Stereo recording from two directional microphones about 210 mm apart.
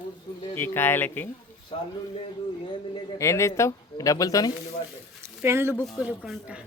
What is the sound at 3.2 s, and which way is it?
Speech, 15° left (ahead or behind).